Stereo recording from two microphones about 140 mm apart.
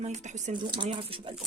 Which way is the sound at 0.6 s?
35° right (ahead or behind).